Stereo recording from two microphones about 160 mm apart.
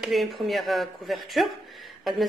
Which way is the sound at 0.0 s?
Centre (ahead or behind).